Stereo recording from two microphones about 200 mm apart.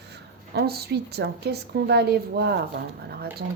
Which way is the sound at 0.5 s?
50° right (ahead or behind).